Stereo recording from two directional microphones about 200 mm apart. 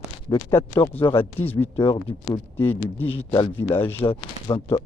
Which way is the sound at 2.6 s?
10° left (ahead or behind).